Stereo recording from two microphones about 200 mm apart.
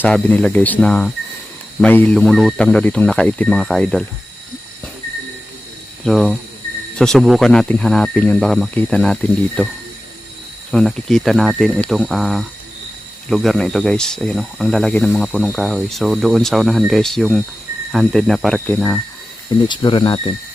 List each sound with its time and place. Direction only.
0.0 s cricket: 5° left (ahead or behind)
1.8 s speech: 5° left (ahead or behind)
6.1 s speech: centre (ahead or behind)
10.7 s speech: centre (ahead or behind)
19.6 s speech: 25° left (ahead or behind)